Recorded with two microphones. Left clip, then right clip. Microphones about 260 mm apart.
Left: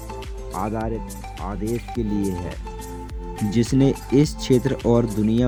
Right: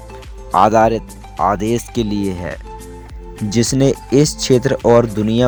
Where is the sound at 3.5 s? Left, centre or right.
Right.